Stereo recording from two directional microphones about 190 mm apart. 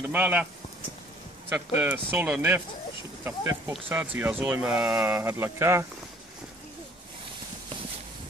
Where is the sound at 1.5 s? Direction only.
10° right (ahead or behind).